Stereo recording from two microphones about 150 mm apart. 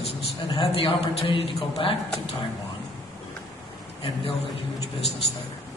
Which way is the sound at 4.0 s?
40° left (ahead or behind).